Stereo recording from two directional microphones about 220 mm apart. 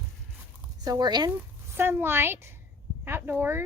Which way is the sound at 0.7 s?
15° right (ahead or behind).